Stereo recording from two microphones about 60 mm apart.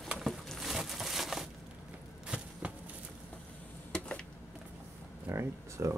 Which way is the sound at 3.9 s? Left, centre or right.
Centre.